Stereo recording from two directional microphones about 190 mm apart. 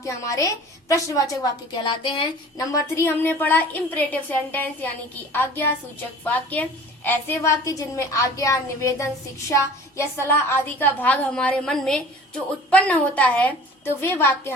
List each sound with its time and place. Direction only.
0.0 s a woman's voice: 15° left (ahead or behind)